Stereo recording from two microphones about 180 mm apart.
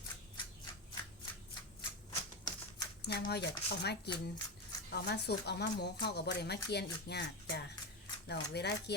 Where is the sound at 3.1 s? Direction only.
65° left (ahead or behind).